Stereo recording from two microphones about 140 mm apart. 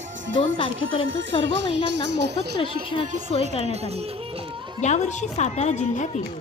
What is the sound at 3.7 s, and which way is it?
Speech, 50° right (ahead or behind).